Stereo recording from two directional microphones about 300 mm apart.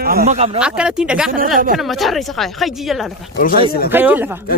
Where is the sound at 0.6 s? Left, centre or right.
Centre.